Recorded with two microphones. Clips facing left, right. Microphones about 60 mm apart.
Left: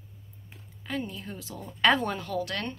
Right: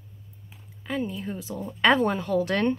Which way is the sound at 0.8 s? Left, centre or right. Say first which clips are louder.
Right 5 dB; centre.